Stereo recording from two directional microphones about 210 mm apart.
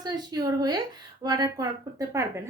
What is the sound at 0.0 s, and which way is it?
A child's voice, 20° right (ahead or behind).